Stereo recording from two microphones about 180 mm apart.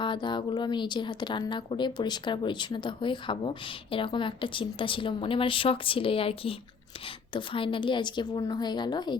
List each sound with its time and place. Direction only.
0.0 s speech: 25° left (ahead or behind)